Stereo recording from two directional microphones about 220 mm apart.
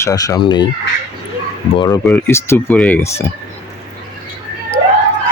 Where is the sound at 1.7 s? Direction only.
20° left (ahead or behind).